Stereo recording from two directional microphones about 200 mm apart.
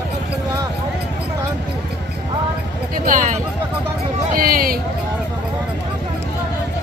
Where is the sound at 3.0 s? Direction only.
40° right (ahead or behind).